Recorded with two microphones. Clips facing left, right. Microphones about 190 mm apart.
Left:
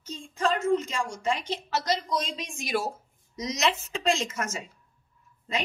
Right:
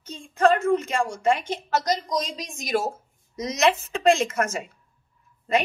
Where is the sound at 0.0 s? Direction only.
60° right (ahead or behind).